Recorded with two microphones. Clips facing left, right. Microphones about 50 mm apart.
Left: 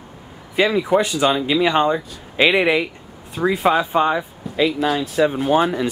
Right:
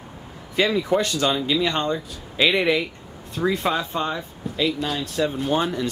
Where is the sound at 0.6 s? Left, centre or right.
Centre.